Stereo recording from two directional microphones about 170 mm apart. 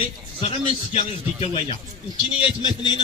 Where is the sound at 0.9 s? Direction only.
35° left (ahead or behind).